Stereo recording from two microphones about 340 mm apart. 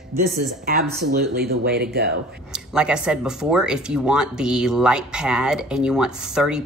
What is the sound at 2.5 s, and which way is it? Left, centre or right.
Speech, centre.